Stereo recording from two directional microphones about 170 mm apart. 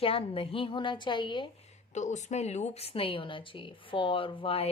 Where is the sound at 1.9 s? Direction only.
45° left (ahead or behind).